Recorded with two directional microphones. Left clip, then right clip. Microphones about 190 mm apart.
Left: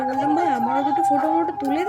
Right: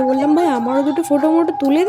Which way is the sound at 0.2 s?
30° right (ahead or behind).